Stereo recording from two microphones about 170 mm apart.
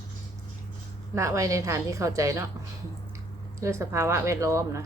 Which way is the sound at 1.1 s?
15° right (ahead or behind).